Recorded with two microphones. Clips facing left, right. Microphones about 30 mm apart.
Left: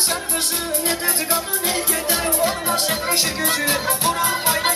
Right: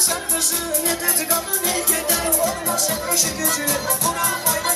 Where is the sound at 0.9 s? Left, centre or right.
Left.